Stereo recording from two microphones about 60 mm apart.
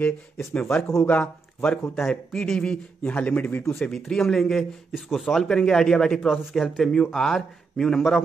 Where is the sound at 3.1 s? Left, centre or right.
Left.